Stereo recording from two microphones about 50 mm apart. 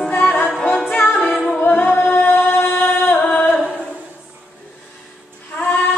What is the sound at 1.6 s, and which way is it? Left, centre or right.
Singing, left.